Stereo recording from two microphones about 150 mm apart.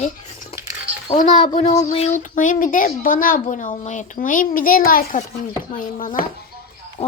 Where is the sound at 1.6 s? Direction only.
50° left (ahead or behind).